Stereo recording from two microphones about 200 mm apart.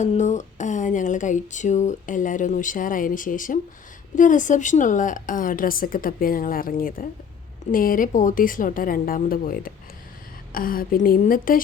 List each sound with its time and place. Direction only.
0.0 s a woman's voice: 35° left (ahead or behind)